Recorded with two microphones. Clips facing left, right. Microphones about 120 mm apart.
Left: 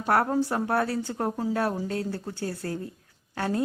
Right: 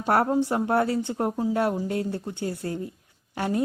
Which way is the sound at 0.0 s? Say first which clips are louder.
Right 2 dB; 20° right (ahead or behind).